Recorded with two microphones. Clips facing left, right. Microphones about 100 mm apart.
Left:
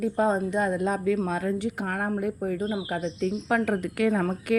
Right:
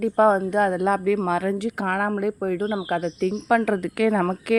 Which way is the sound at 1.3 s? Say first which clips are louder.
Right 4 dB; 90° right.